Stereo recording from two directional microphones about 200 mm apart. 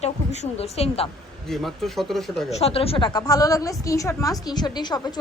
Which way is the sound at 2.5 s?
30° left (ahead or behind).